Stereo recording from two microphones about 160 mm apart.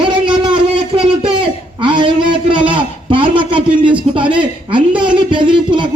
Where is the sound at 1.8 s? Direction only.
30° right (ahead or behind).